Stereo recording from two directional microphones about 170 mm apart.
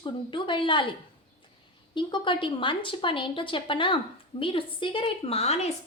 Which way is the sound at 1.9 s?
30° left (ahead or behind).